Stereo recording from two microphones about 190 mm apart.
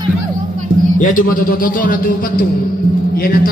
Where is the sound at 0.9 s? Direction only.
45° left (ahead or behind).